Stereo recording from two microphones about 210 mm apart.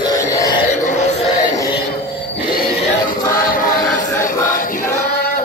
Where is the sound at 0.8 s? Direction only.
35° left (ahead or behind).